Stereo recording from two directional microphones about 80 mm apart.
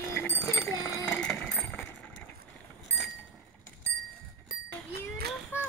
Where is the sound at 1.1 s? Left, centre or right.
Centre.